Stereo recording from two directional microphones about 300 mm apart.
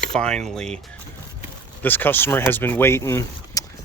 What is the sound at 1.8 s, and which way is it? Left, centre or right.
Speech, centre.